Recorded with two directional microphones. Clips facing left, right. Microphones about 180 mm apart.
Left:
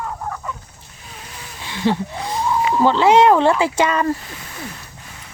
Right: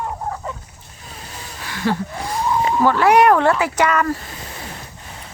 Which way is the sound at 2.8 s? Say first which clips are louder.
Left 1 dB; 20° left (ahead or behind).